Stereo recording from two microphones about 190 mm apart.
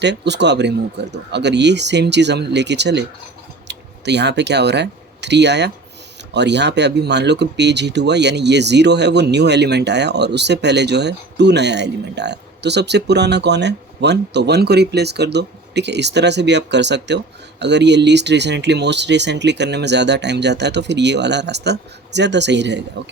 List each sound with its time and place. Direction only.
0.0 s speech: 65° right (ahead or behind)